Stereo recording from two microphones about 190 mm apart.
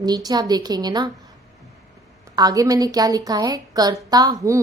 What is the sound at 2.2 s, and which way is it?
A woman's voice, 20° right (ahead or behind).